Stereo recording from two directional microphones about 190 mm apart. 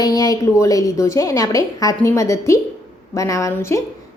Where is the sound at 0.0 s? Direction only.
20° left (ahead or behind).